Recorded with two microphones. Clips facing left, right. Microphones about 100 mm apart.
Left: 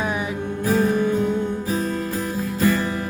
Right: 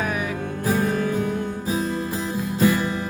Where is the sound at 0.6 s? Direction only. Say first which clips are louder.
Left 3 dB; 15° right (ahead or behind).